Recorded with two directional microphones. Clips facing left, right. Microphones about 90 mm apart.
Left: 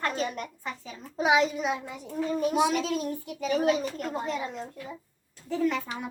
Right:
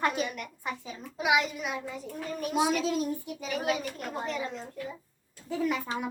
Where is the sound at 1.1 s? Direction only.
30° left (ahead or behind).